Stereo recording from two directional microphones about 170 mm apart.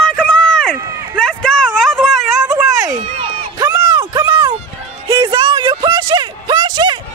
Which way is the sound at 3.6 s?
25° right (ahead or behind).